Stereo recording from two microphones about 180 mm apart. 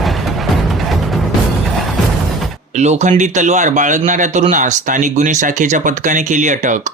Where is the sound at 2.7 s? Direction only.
40° right (ahead or behind).